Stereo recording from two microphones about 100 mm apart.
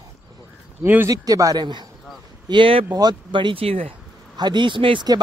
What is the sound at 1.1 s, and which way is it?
Speech, 35° right (ahead or behind).